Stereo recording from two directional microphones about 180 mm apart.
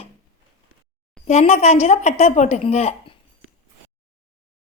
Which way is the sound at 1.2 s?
35° left (ahead or behind).